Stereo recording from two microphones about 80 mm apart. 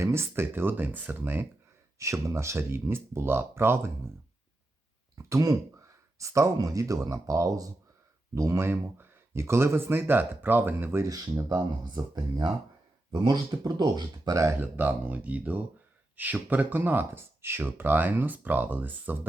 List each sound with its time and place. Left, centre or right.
0.0 s speech: right
2.0 s speech: right
5.1 s speech: right
8.4 s speech: right
11.6 s speech: right
14.4 s speech: right